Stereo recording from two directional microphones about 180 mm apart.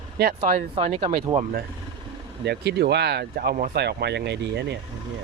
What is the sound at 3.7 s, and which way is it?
Speech, 65° right (ahead or behind).